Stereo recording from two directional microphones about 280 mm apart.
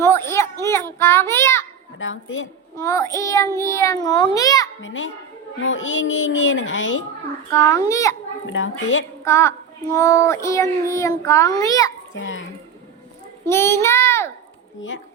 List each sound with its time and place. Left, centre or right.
0.0 s a sound: centre
0.6 s a child's voice: centre
2.0 s speech: left
2.7 s a child's voice: centre
4.8 s speech: left
7.5 s a child's voice: centre
8.4 s speech: left
9.2 s a child's voice: centre
12.1 s speech: left
13.5 s a child's voice: centre
14.8 s speech: left